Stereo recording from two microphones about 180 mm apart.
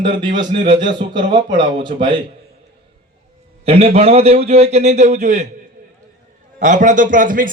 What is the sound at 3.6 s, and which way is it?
A man's voice, 35° right (ahead or behind).